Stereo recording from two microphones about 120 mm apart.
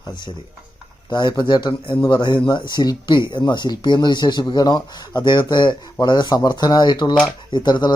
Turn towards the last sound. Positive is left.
turn(degrees=35)  # may be behind; listen again after turning